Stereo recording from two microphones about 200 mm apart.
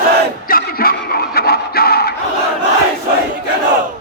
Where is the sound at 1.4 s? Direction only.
50° left (ahead or behind).